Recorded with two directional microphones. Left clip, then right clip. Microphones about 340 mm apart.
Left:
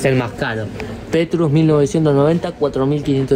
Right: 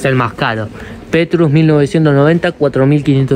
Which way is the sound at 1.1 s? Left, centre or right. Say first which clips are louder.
Right 5 dB; right.